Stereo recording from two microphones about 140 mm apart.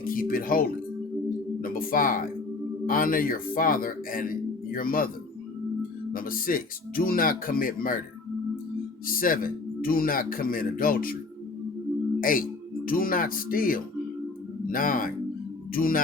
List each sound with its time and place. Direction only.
0.0 s speech: 90° left
6.1 s speech: 90° left
9.0 s speech: 90° left
12.2 s speech: 85° left